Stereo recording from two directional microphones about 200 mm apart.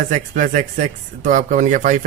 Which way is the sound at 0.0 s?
45° right (ahead or behind).